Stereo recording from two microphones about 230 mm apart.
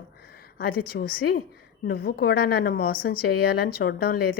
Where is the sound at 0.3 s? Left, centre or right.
Left.